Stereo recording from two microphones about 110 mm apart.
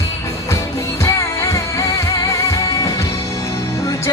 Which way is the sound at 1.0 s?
25° left (ahead or behind).